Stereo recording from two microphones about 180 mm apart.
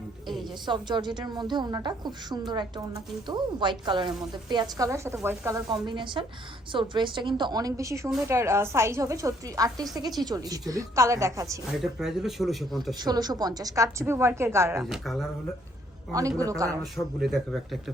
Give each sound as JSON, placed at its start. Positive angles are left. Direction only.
{"t": 0.6, "sound": "a woman's voice", "side_deg": -25}
{"t": 11.8, "sound": "speech", "side_deg": 0}
{"t": 13.1, "sound": "a woman's voice", "side_deg": -20}
{"t": 14.8, "sound": "speech", "side_deg": 0}
{"t": 16.4, "sound": "a woman's voice", "side_deg": -20}
{"t": 17.2, "sound": "speech", "side_deg": 0}